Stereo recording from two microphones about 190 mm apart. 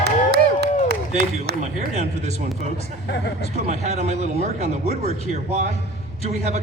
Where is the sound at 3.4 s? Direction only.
35° right (ahead or behind).